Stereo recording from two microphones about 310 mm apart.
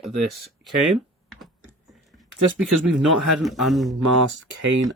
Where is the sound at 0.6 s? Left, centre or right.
Centre.